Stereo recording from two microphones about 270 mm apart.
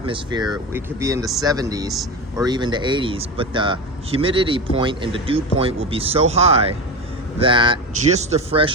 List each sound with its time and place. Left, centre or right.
0.0 s speech: centre